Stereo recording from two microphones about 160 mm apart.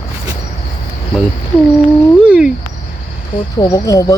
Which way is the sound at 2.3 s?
5° right (ahead or behind).